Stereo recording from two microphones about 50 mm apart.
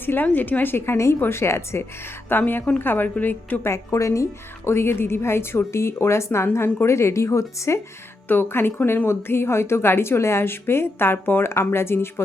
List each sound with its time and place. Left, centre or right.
0.0 s a woman's voice: left
1.2 s a woman's voice: left
2.3 s a woman's voice: left
3.7 s a woman's voice: left
4.7 s a woman's voice: left
8.3 s a woman's voice: left
11.6 s a woman's voice: left